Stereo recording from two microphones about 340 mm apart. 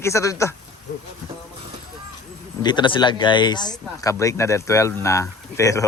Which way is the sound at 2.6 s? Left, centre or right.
Centre.